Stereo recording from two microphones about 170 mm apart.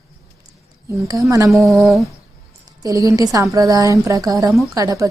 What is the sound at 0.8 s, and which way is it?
Speech, 20° right (ahead or behind).